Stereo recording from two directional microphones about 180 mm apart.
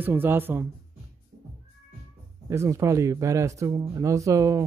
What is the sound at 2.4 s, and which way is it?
Speech, 15° right (ahead or behind).